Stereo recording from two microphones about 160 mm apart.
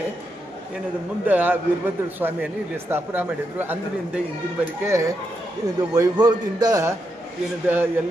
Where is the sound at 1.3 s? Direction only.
10° right (ahead or behind).